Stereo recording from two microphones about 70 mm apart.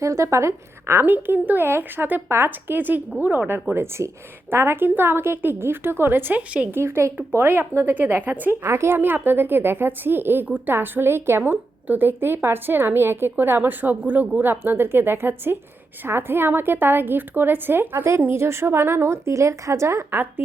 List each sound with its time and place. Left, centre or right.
0.0 s a woman's voice: right
1.0 s speech: right